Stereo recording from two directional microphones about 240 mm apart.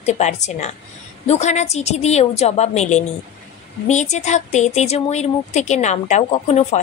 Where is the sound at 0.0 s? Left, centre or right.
Left.